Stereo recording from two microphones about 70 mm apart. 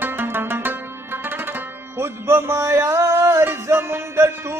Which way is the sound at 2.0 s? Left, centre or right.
Right.